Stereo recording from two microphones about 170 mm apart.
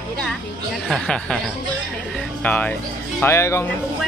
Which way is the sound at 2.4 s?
10° left (ahead or behind).